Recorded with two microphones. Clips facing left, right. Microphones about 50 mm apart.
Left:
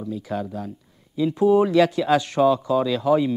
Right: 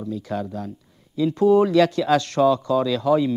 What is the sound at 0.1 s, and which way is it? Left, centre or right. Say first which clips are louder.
A man's voice: even; centre.